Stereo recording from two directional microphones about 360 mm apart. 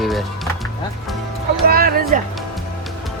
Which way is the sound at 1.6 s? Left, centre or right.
Right.